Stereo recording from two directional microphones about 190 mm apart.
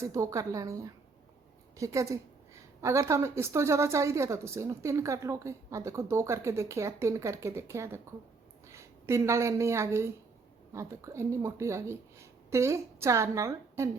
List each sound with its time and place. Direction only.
0.0 s a woman's voice: 15° right (ahead or behind)